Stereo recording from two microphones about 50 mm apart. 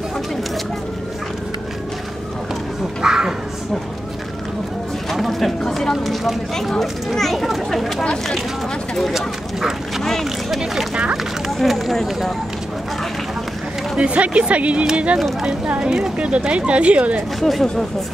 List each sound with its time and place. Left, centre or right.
3.0 s a sound: centre
5.1 s a sound: centre
5.6 s speech: centre
8.0 s speech: centre
9.1 s speech: centre
13.9 s speech: right
17.4 s speech: centre